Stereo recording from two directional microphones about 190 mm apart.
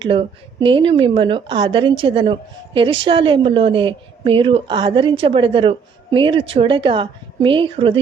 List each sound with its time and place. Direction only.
0.0 s a woman's voice: 30° right (ahead or behind)